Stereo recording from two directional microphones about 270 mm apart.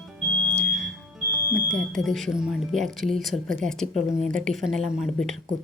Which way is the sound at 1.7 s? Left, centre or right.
Centre.